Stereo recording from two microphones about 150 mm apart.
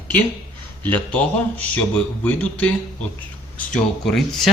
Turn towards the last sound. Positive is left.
turn(degrees=5)  # may be behind; listen again after turning